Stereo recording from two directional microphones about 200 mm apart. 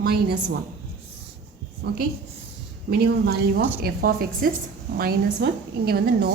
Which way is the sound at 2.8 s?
50° right (ahead or behind).